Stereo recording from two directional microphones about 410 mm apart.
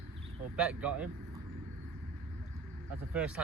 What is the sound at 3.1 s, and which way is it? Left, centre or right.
Speech, centre.